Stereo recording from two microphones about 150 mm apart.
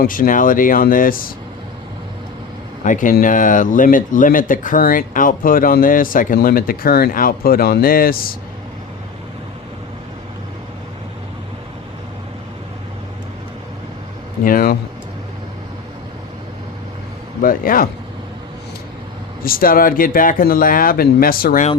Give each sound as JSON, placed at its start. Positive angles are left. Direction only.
{"t": 0.0, "sound": "speech", "side_deg": 70}
{"t": 2.8, "sound": "speech", "side_deg": 60}
{"t": 14.4, "sound": "speech", "side_deg": 80}
{"t": 17.4, "sound": "speech", "side_deg": 70}
{"t": 19.4, "sound": "speech", "side_deg": 75}